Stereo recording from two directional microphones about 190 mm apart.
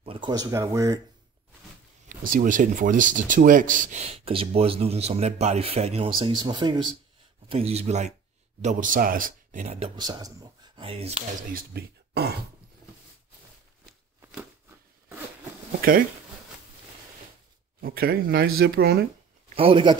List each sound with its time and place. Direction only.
0.0 s speech: 25° right (ahead or behind)
2.0 s speech: 45° right (ahead or behind)
10.0 s speech: 20° right (ahead or behind)
11.5 s speech: 55° right (ahead or behind)
17.7 s speech: 55° right (ahead or behind)
19.5 s speech: 30° right (ahead or behind)